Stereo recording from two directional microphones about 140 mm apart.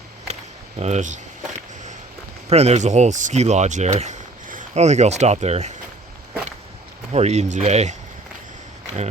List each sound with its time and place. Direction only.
0.8 s speech: 55° right (ahead or behind)
2.5 s speech: 50° right (ahead or behind)
7.1 s speech: 50° right (ahead or behind)